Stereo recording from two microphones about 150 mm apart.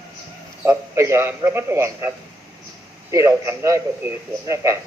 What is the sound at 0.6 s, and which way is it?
A man's voice, 20° right (ahead or behind).